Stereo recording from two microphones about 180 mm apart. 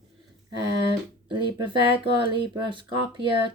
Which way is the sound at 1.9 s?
25° right (ahead or behind).